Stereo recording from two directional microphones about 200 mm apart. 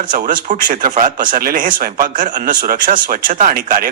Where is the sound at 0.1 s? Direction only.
45° right (ahead or behind).